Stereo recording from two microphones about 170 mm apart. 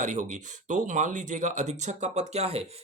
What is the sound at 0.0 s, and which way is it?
Speech, 45° right (ahead or behind).